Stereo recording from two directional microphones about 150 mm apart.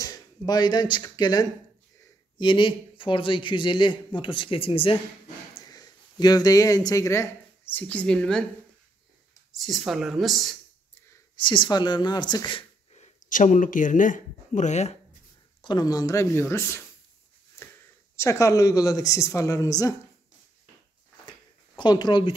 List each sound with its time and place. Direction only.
0.0 s speech: 25° left (ahead or behind)
5.7 s speech: 25° left (ahead or behind); by 8.5 s 5° left (ahead or behind)
9.5 s speech: centre (ahead or behind)
11.3 s speech: 35° left (ahead or behind); by 15.0 s 50° left (ahead or behind)
15.6 s speech: 30° left (ahead or behind)
18.1 s speech: 20° left (ahead or behind)
21.3 s a sound: 30° left (ahead or behind)